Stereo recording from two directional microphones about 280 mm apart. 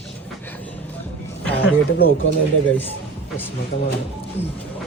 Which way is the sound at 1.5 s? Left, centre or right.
Left.